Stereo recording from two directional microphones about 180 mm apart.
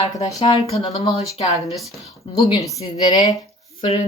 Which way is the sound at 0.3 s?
35° left (ahead or behind).